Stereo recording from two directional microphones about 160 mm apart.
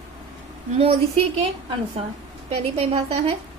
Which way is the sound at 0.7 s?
40° right (ahead or behind).